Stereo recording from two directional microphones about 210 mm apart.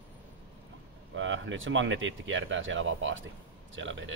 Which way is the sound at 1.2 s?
65° right (ahead or behind).